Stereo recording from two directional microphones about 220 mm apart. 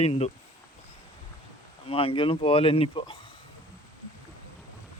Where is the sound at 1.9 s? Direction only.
25° left (ahead or behind).